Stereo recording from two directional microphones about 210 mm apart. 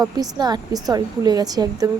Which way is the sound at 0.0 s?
20° right (ahead or behind).